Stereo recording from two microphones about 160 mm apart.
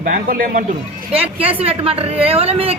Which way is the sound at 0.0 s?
60° right (ahead or behind).